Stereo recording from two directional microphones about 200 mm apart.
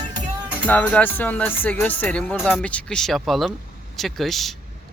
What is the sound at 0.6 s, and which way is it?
Speech, 10° left (ahead or behind).